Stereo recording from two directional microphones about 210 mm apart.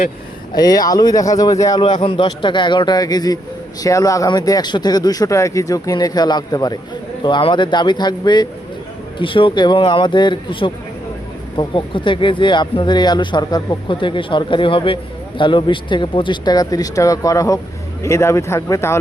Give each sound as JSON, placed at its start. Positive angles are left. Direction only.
{"t": 0.5, "sound": "speech", "side_deg": 20}